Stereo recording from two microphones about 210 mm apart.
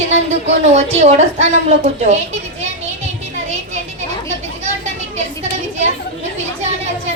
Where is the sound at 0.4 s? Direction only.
30° right (ahead or behind).